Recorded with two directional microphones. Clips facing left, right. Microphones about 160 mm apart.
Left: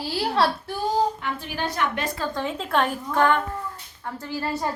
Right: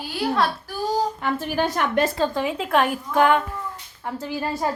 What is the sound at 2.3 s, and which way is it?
Speech, 5° right (ahead or behind).